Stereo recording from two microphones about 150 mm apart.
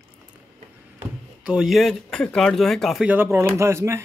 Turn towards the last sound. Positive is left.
turn(degrees=-15)  # may be behind; listen again after turning